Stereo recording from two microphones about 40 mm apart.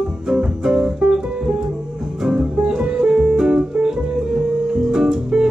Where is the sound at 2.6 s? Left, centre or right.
Right.